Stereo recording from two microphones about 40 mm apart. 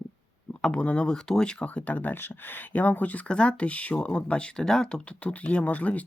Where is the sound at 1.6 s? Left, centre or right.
Left.